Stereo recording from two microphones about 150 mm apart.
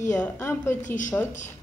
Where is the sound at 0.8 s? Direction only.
55° left (ahead or behind).